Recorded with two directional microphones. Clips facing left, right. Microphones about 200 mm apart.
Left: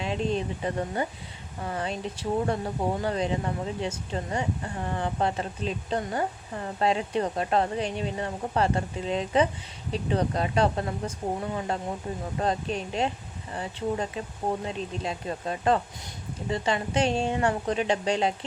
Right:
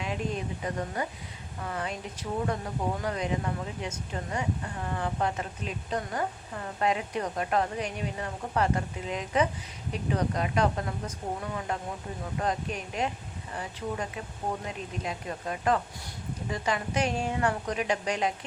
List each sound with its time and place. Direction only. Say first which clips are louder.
0.0 s speech: left 4 dB; 30° left (ahead or behind)